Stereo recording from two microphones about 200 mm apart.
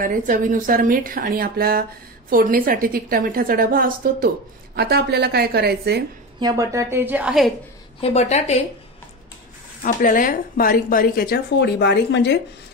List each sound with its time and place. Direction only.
0.0 s speech: 40° right (ahead or behind)
6.4 s a woman's voice: 15° right (ahead or behind)
8.0 s a woman's voice: 35° left (ahead or behind)
9.8 s a woman's voice: 40° left (ahead or behind); by 12.4 s 60° left (ahead or behind)